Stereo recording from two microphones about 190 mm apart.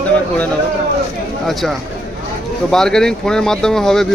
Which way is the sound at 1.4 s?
Centre (ahead or behind).